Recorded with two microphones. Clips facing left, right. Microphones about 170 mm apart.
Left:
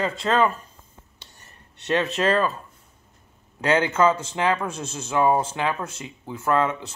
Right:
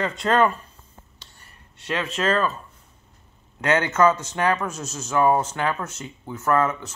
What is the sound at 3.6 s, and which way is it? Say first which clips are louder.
A man's voice: even; 30° left (ahead or behind).